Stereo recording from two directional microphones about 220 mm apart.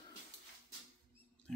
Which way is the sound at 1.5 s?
5° left (ahead or behind).